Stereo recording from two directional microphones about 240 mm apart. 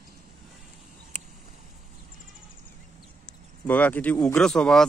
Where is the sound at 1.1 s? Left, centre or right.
Right.